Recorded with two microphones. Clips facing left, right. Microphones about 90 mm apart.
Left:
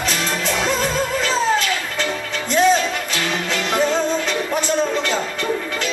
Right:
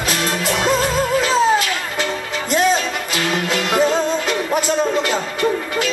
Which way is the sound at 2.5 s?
5° right (ahead or behind).